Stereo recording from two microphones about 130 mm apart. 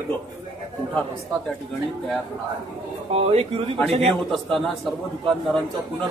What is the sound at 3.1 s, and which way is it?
Speech, 50° right (ahead or behind).